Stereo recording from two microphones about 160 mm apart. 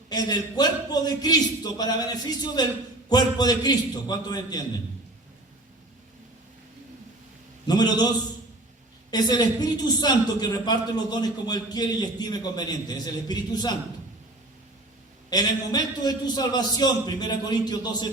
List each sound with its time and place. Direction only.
0.1 s a woman's voice: 25° left (ahead or behind)
7.7 s a woman's voice: 25° left (ahead or behind)
15.3 s a woman's voice: 25° left (ahead or behind)